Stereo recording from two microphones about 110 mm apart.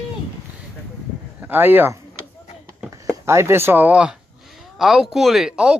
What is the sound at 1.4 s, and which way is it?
Speech, 20° right (ahead or behind).